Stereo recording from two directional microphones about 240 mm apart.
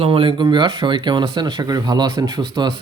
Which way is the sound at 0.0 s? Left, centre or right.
Right.